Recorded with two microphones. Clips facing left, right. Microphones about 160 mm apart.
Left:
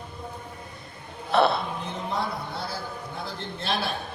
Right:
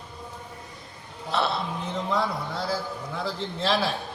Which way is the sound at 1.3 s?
55° left (ahead or behind).